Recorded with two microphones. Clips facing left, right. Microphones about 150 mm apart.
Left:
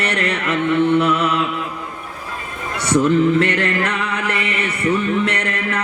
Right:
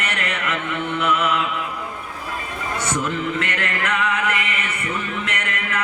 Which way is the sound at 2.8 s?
35° left (ahead or behind).